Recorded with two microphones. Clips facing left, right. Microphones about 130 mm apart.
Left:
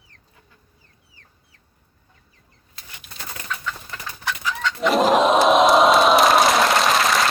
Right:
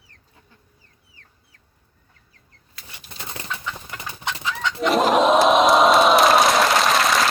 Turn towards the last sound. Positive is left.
turn(degrees=0)  # may be behind; listen again after turning